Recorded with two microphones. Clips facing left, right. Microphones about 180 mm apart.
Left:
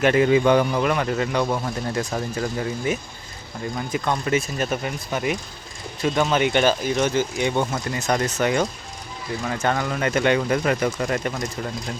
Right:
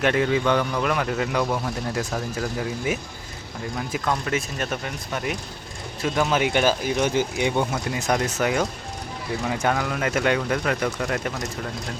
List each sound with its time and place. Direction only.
0.0 s a man's voice: 5° left (ahead or behind)
0.9 s speech: centre (ahead or behind)